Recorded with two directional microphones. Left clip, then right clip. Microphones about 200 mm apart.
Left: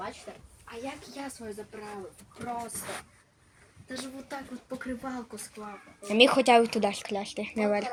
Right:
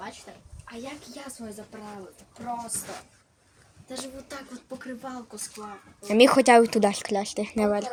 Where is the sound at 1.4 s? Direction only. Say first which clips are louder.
Even; 40° right (ahead or behind).